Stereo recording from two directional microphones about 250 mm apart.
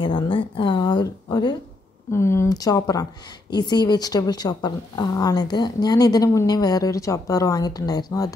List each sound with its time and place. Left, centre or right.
0.0 s a woman's voice: left